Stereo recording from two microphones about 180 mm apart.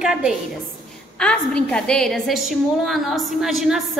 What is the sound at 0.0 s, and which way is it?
A woman's voice, 5° right (ahead or behind).